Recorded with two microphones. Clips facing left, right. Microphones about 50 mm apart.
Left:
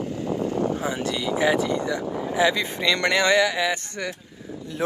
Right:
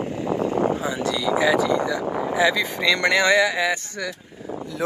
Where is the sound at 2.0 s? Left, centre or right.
Right.